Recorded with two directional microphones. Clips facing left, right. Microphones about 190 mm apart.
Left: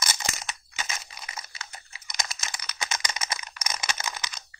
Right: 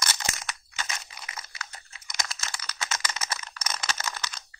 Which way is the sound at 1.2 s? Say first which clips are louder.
Even; 25° left (ahead or behind).